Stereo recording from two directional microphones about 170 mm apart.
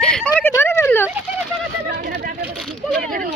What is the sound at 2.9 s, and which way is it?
Speech, 55° right (ahead or behind).